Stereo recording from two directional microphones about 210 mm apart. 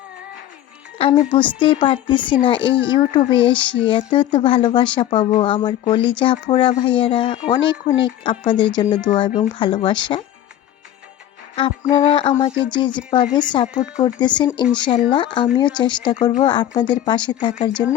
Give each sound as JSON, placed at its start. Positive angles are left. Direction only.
{"t": 1.3, "sound": "a woman's voice", "side_deg": 25}
{"t": 11.5, "sound": "a woman's voice", "side_deg": 25}